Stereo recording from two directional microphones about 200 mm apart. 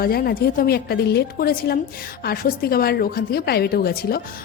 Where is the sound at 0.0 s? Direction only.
50° left (ahead or behind).